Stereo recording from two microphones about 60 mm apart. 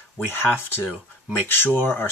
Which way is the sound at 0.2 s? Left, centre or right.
Left.